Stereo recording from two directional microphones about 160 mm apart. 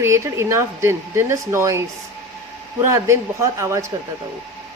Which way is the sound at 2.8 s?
15° right (ahead or behind).